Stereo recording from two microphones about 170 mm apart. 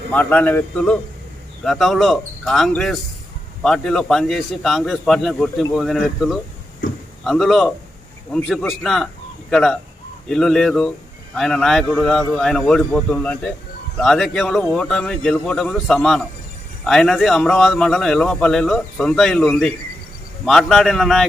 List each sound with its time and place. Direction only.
0.1 s a man's voice: 10° left (ahead or behind)